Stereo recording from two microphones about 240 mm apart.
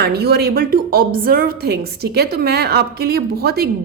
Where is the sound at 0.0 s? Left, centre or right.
Right.